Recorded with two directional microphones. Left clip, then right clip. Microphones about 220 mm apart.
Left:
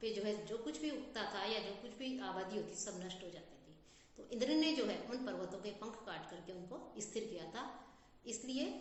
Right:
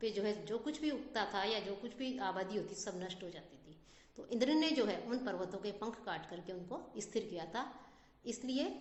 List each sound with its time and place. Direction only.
0.0 s a woman's voice: 50° right (ahead or behind)
4.3 s a woman's voice: 50° right (ahead or behind)